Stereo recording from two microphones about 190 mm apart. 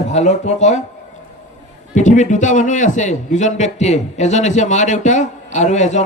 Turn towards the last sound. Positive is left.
turn(degrees=40)  # may be behind; listen again after turning